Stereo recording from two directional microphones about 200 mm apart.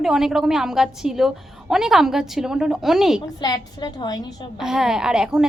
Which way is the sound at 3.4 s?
20° left (ahead or behind).